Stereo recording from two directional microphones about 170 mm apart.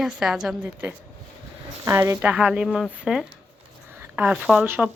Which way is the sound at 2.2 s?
5° right (ahead or behind).